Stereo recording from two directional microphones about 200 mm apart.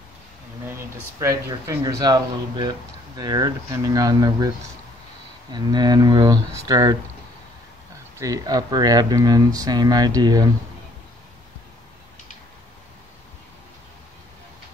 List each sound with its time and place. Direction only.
0.7 s speech: 15° right (ahead or behind)
5.5 s speech: 20° right (ahead or behind)
8.2 s speech: 20° right (ahead or behind)